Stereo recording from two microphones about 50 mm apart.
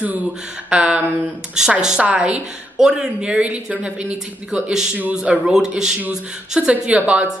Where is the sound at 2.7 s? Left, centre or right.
Centre.